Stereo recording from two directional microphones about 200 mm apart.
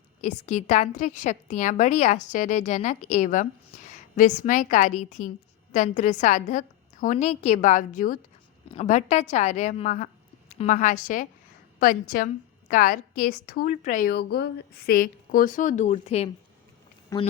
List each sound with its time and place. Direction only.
0.2 s a woman's voice: 35° left (ahead or behind)
14.1 s a woman's voice: 55° left (ahead or behind); by 16.3 s 30° left (ahead or behind)
17.1 s speech: 15° left (ahead or behind)